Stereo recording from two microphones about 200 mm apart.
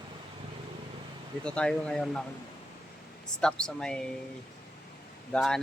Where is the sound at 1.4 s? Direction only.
5° left (ahead or behind).